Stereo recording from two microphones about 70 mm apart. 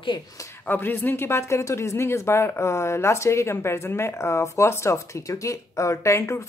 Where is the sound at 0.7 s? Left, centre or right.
Left.